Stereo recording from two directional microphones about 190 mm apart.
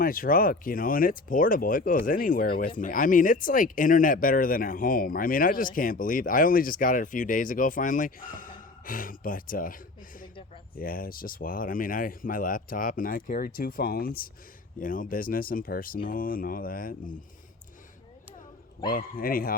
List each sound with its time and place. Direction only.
0.0 s speech: 50° left (ahead or behind)
18.9 s speech: 50° left (ahead or behind)